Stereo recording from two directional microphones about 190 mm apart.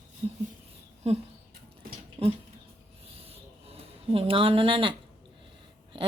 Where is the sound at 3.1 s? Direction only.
30° right (ahead or behind).